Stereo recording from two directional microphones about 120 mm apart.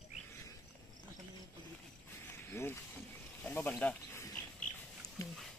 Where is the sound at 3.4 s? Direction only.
10° left (ahead or behind).